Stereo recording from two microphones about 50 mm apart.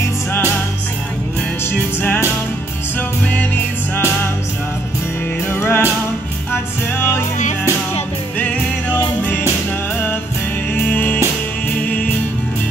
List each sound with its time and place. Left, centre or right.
1.7 s music: left
3.3 s music: left
5.5 s music: left
10.7 s music: left